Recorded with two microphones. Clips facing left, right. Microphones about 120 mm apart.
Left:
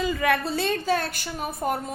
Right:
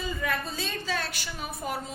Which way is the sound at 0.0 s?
85° left.